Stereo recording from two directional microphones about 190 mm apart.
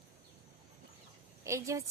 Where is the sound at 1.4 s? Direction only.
15° right (ahead or behind).